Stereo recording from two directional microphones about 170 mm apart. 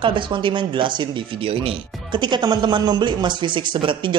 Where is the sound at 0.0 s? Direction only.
30° right (ahead or behind).